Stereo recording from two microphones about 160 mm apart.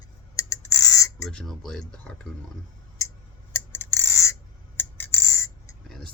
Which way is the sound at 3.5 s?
15° left (ahead or behind).